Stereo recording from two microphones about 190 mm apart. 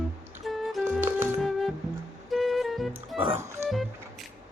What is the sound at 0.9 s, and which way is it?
Music, 10° right (ahead or behind).